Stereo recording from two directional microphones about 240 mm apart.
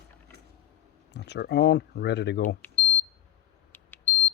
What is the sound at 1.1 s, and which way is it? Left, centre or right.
Speech, left.